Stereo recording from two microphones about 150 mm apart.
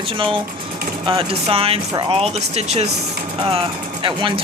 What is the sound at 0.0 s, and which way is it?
Speech, 35° right (ahead or behind).